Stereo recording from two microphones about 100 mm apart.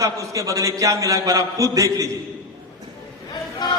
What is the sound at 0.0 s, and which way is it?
A man's voice, 35° right (ahead or behind).